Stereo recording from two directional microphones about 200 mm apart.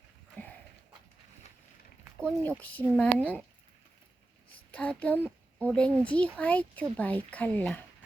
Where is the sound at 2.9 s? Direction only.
5° left (ahead or behind).